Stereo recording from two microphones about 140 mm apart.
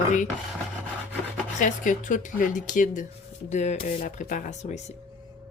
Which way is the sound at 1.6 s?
65° left (ahead or behind).